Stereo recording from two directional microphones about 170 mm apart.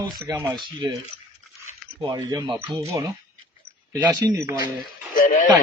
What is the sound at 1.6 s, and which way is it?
Zipper, 20° right (ahead or behind).